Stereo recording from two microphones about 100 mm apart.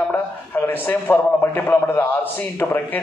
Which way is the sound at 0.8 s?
20° left (ahead or behind).